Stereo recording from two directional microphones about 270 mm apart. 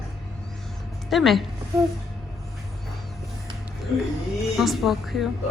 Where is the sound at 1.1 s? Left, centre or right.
Centre.